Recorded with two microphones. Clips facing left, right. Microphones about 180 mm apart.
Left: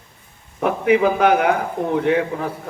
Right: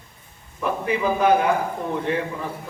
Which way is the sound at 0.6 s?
80° left.